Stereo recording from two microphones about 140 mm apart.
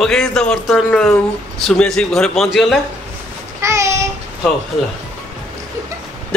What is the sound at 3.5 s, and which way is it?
Child singing, 20° right (ahead or behind).